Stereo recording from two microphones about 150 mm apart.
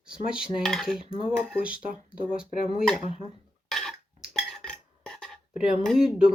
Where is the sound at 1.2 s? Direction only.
5° right (ahead or behind).